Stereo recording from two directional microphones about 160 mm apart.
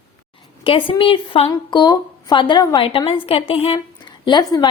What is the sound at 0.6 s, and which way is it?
A woman's voice, 35° left (ahead or behind).